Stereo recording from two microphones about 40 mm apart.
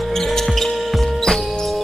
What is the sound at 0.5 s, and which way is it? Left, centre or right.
Music, centre.